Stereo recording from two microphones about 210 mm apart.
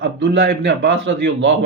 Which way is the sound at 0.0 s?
55° right (ahead or behind).